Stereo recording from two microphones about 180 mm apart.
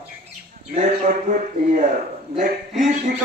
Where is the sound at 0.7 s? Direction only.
45° right (ahead or behind).